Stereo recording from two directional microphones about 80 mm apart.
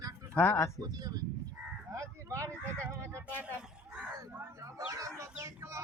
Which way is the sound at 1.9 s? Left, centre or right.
Right.